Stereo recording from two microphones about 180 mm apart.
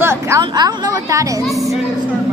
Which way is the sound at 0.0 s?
15° right (ahead or behind).